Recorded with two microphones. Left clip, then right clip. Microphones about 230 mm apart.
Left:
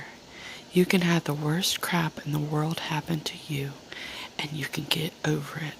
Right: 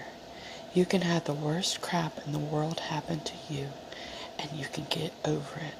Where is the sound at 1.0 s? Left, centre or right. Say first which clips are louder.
Left 3 dB; left.